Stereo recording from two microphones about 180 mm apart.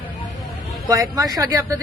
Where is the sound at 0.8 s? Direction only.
20° right (ahead or behind).